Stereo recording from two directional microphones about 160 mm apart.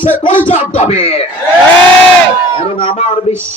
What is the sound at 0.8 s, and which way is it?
Speech, 40° left (ahead or behind).